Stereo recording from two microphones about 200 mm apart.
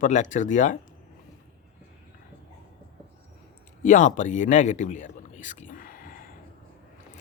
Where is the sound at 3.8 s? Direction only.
40° left (ahead or behind).